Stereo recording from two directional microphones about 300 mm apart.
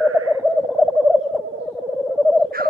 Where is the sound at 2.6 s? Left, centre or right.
Right.